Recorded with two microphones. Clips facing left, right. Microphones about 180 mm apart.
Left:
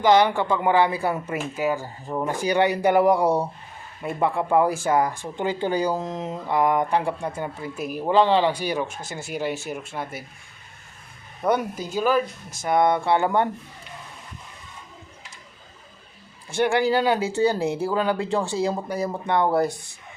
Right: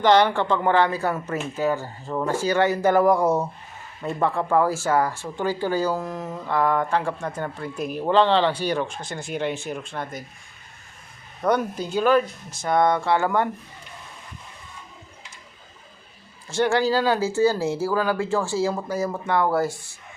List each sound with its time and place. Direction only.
0.0 s speech: 10° left (ahead or behind)
11.4 s speech: 5° left (ahead or behind)
12.6 s speech: 15° left (ahead or behind)
16.6 s speech: 15° left (ahead or behind)